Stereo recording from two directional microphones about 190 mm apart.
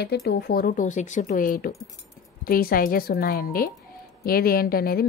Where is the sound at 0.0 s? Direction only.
60° left (ahead or behind).